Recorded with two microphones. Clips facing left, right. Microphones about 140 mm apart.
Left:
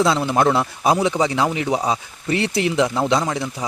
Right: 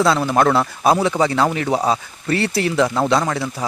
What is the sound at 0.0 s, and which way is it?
Speech, 20° left (ahead or behind).